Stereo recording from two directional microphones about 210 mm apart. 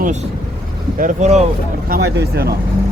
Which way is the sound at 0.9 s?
35° right (ahead or behind).